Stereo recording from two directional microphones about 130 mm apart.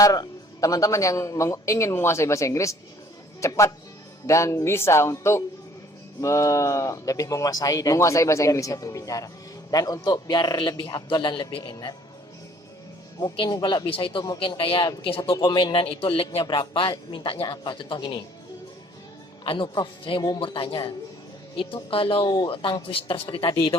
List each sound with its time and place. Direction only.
0.0 s a man's voice: 30° left (ahead or behind)
13.3 s a man's voice: 35° left (ahead or behind)
19.5 s a man's voice: 40° left (ahead or behind)